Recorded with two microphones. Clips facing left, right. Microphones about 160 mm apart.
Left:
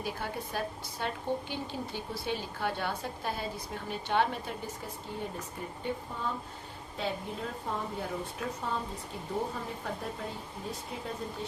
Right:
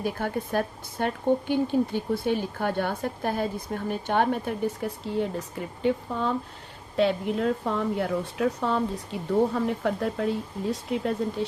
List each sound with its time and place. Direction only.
0.0 s speech: 50° right (ahead or behind); by 6.3 s 90° right
6.9 s speech: 80° right